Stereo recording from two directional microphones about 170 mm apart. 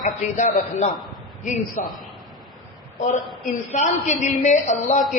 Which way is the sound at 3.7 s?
45° left (ahead or behind).